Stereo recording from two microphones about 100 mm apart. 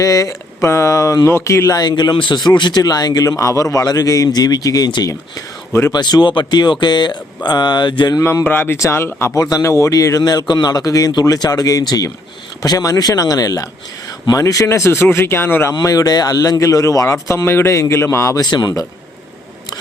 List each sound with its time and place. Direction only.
0.0 s speech: 35° left (ahead or behind)
1.8 s speech: 45° left (ahead or behind)
5.9 s speech: 45° left (ahead or behind)
8.4 s speech: 20° left (ahead or behind)
9.4 s speech: 35° left (ahead or behind)
15.8 s speech: 35° left (ahead or behind)